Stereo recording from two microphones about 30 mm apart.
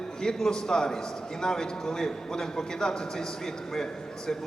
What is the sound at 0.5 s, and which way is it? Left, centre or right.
A man's voice, left.